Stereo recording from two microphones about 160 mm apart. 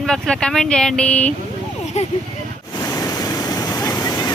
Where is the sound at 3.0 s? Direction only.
25° left (ahead or behind).